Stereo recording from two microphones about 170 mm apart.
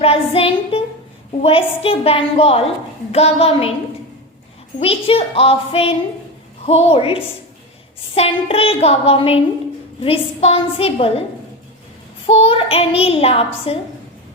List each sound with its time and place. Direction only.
0.0 s a child's voice: 35° left (ahead or behind)
4.8 s a child's voice: 35° left (ahead or behind)
12.2 s a child's voice: 35° left (ahead or behind)